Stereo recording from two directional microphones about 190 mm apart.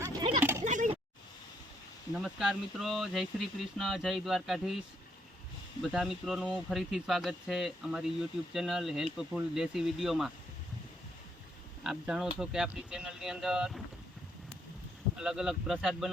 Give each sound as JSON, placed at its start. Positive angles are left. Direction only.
{"t": 0.6, "sound": "a sound", "side_deg": -40}
{"t": 2.1, "sound": "speech", "side_deg": 0}
{"t": 5.8, "sound": "speech", "side_deg": 0}
{"t": 11.8, "sound": "speech", "side_deg": -5}
{"t": 15.2, "sound": "speech", "side_deg": -5}